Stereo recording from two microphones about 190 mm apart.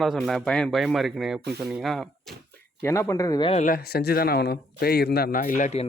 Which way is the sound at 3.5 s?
40° left (ahead or behind).